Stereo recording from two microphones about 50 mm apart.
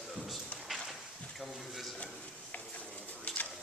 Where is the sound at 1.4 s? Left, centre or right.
Centre.